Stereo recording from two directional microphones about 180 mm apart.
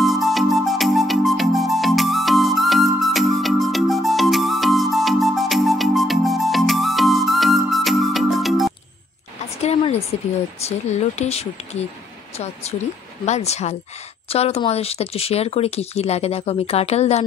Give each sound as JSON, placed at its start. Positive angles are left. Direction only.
{"t": 0.0, "sound": "music", "side_deg": 0}
{"t": 9.6, "sound": "a sound", "side_deg": 35}
{"t": 10.6, "sound": "speech", "side_deg": 35}